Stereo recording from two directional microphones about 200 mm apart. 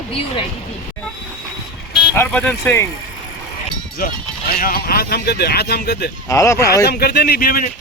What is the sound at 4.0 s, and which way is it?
Speech, 45° left (ahead or behind).